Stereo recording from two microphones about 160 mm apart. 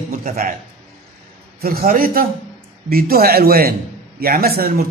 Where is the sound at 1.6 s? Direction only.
65° right (ahead or behind).